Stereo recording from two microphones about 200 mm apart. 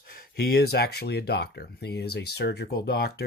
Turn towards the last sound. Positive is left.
turn(degrees=55)  # may be behind; listen again after turning